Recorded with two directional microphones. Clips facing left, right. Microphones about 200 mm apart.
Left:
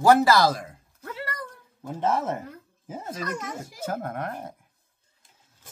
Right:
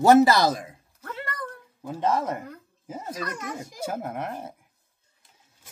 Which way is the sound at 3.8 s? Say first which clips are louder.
Even; 10° right (ahead or behind).